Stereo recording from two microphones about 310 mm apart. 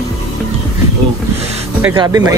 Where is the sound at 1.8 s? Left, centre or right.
Centre.